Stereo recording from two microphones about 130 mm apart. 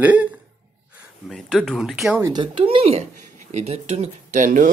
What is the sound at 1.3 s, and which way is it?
Speech, 5° left (ahead or behind).